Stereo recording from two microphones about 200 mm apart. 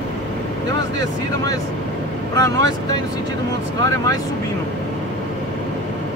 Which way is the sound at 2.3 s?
20° left (ahead or behind).